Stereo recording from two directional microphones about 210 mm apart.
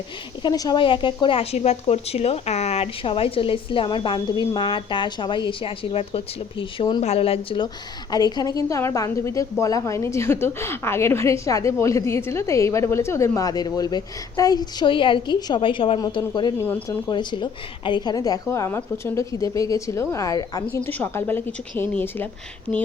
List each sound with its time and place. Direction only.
0.4 s a woman's voice: 20° left (ahead or behind)